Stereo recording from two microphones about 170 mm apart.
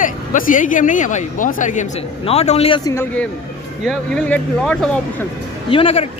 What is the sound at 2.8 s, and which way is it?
A man's voice, 15° left (ahead or behind).